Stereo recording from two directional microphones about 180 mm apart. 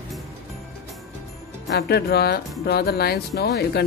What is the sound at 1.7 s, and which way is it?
Speech, 65° left (ahead or behind).